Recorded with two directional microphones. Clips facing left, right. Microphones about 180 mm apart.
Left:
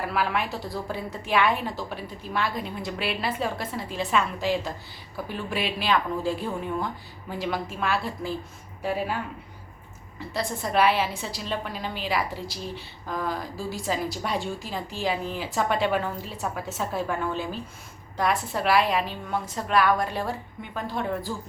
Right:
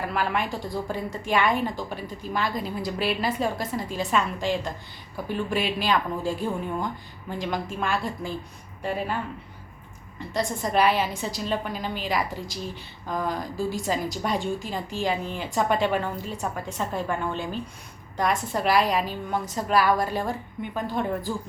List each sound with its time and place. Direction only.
0.1 s a woman's voice: centre (ahead or behind)
10.3 s a woman's voice: centre (ahead or behind)